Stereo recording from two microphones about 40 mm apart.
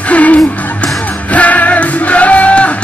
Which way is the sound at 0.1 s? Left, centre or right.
Left.